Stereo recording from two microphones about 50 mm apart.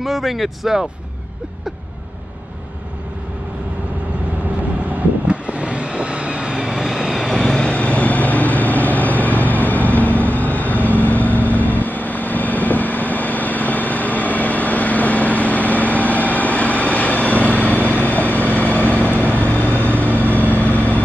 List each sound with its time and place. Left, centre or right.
0.0 s speech: centre
5.3 s vehicle: right
6.6 s vehicle: centre
7.4 s vehicle: centre; by 21.0 s left